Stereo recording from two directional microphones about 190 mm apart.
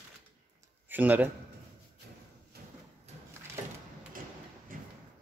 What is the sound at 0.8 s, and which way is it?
Speech, 10° right (ahead or behind).